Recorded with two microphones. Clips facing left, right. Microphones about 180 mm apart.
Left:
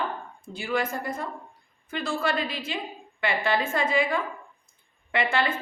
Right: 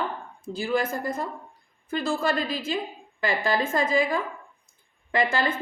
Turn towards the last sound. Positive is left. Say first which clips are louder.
# right 1 dB
turn(degrees=-40)  # may be behind; listen again after turning